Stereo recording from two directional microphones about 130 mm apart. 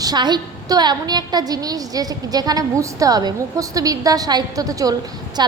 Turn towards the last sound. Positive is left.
turn(degrees=-35)  # may be behind; listen again after turning